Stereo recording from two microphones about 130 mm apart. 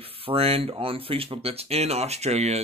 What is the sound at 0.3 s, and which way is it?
Speech, 50° right (ahead or behind).